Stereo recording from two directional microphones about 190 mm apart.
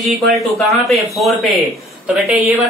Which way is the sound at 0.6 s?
Centre (ahead or behind).